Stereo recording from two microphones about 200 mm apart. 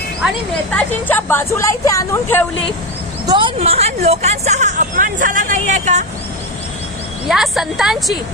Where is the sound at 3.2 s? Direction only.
25° right (ahead or behind).